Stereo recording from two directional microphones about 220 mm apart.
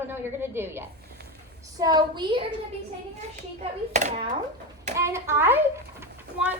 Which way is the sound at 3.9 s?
30° right (ahead or behind).